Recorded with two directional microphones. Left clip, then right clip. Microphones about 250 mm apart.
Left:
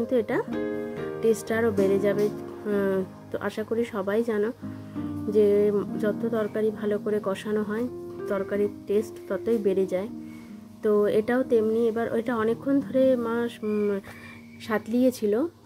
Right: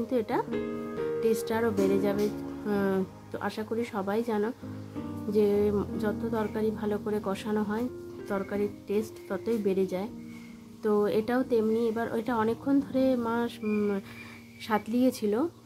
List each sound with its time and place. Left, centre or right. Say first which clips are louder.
0.1 s speech: left 2 dB; centre